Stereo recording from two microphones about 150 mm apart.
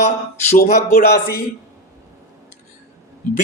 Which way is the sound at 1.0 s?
90° left.